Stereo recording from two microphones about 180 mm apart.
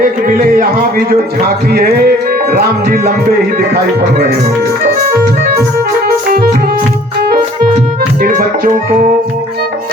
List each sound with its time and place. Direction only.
0.0 s speech: 50° right (ahead or behind)
1.7 s music: 60° right (ahead or behind)
8.2 s speech: 55° right (ahead or behind)